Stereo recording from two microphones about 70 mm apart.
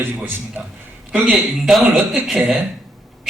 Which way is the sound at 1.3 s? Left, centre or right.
Centre.